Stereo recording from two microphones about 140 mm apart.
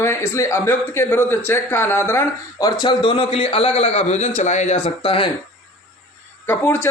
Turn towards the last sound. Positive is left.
turn(degrees=15)  # may be behind; listen again after turning